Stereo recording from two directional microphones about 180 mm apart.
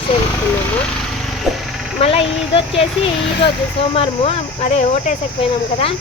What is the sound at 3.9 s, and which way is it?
Speech, 30° left (ahead or behind).